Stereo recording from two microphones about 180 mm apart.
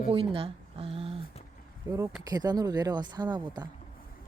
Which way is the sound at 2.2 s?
20° right (ahead or behind).